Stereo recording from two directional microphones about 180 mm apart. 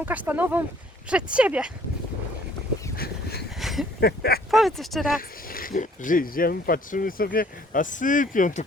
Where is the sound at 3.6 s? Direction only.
Centre (ahead or behind).